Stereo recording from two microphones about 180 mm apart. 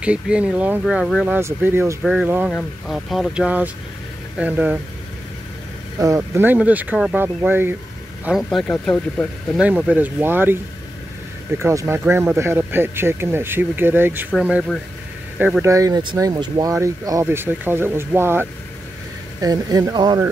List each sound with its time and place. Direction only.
0.0 s speech: 5° right (ahead or behind)
5.9 s speech: 15° right (ahead or behind)
8.3 s speech: centre (ahead or behind)
9.6 s speech: 5° right (ahead or behind); by 20.2 s 25° right (ahead or behind)